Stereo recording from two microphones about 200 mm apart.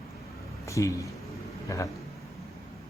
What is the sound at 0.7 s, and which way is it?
Speech, 15° left (ahead or behind).